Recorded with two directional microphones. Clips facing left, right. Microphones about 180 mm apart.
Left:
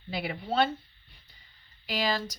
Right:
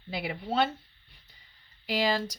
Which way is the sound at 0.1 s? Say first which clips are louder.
Even; 20° right (ahead or behind).